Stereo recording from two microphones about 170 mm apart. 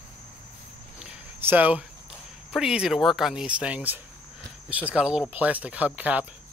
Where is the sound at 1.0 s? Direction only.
10° right (ahead or behind).